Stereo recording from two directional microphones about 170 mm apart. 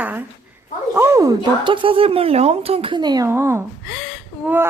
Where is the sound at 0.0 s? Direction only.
10° right (ahead or behind).